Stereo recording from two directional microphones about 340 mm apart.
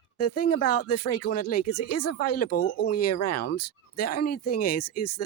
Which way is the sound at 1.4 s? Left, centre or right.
Left.